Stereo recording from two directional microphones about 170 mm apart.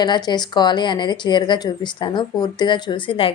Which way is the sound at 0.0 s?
25° left (ahead or behind).